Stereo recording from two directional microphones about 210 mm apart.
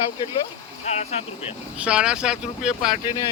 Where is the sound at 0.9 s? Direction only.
30° left (ahead or behind).